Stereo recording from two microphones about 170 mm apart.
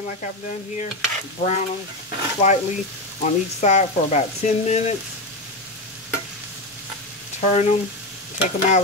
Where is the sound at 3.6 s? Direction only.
40° left (ahead or behind).